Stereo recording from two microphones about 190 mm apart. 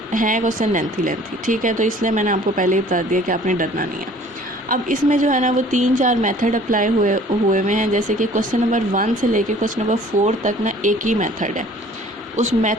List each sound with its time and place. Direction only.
0.1 s speech: 45° right (ahead or behind)